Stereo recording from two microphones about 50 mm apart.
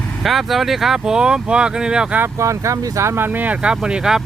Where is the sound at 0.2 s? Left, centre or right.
Centre.